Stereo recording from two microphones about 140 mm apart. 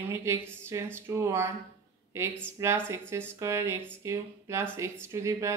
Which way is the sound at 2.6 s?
20° right (ahead or behind).